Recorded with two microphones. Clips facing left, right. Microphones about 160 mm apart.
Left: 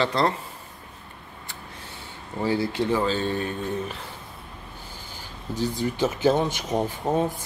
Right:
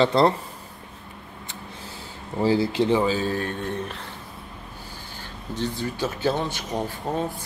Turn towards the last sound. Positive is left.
turn(degrees=20)  # may be behind; listen again after turning